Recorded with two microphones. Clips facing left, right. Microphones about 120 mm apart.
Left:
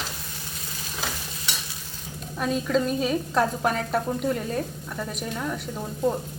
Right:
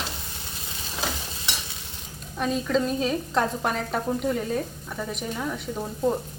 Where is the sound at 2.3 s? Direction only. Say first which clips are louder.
Even; centre (ahead or behind).